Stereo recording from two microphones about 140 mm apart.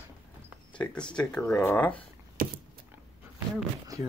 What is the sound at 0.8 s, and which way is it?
Speech, 5° left (ahead or behind).